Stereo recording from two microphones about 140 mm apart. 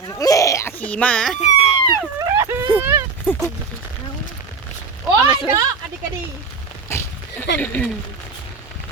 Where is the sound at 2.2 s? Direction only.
25° right (ahead or behind).